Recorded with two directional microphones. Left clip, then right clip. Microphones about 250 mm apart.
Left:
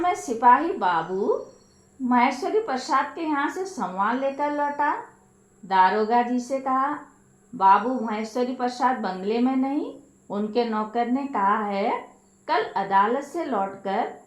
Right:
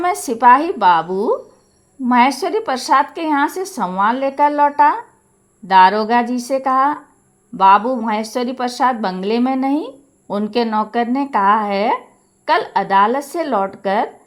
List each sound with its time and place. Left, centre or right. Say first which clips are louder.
0.0 s a woman's voice: right 7 dB; right